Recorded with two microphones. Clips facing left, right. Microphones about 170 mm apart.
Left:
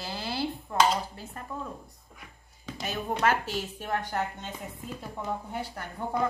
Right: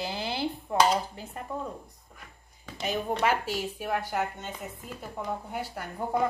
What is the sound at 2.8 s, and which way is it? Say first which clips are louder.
A woman's voice: right 1 dB; 10° right (ahead or behind).